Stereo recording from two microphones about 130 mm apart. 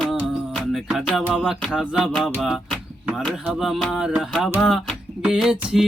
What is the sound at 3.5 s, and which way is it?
Music, centre (ahead or behind).